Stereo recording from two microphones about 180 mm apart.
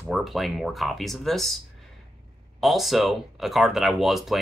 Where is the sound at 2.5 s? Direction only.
Centre (ahead or behind).